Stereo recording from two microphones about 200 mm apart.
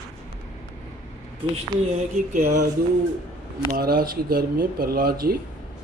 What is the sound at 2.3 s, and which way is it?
Speech, 45° right (ahead or behind).